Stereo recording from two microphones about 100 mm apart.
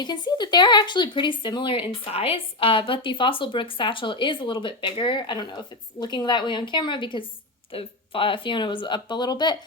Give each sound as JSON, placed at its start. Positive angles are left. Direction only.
{"t": 0.0, "sound": "speech", "side_deg": 45}
{"t": 7.7, "sound": "speech", "side_deg": 65}